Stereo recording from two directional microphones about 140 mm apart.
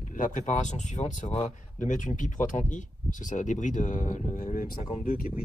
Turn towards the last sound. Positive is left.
turn(degrees=75)  # may be behind; listen again after turning